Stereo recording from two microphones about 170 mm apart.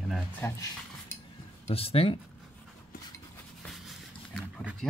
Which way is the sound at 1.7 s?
35° left (ahead or behind).